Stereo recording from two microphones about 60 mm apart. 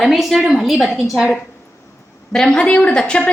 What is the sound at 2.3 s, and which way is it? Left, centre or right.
A woman's voice, centre.